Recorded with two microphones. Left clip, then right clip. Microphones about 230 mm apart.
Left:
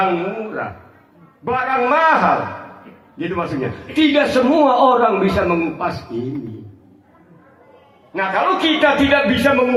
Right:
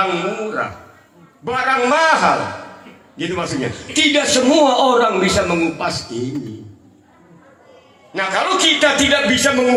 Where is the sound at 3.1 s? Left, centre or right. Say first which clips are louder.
Even; right.